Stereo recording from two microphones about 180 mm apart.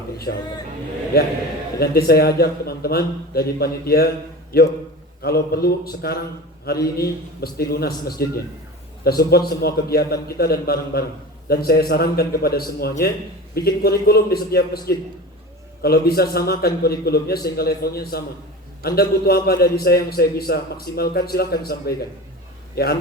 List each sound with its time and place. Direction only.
1.1 s a man's voice: 60° left (ahead or behind)